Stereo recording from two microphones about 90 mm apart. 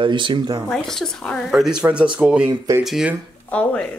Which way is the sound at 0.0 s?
65° right (ahead or behind).